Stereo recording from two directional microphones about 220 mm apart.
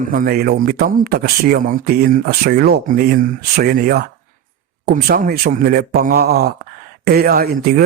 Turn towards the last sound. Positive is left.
turn(degrees=-40)  # may be behind; listen again after turning